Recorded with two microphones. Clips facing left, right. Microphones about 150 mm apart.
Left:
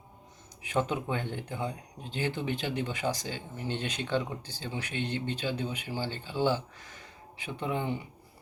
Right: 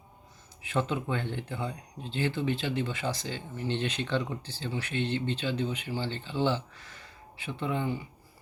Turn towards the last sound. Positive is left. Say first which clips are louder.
# right 1 dB
turn(degrees=20)  # may be behind; listen again after turning